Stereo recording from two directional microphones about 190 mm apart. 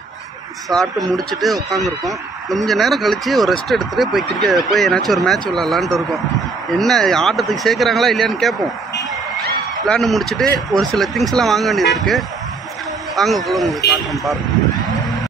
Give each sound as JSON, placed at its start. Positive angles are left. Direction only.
{"t": 0.7, "sound": "speech", "side_deg": 0}
{"t": 1.7, "sound": "speech", "side_deg": -15}
{"t": 2.6, "sound": "speech", "side_deg": 0}
{"t": 9.8, "sound": "speech", "side_deg": 0}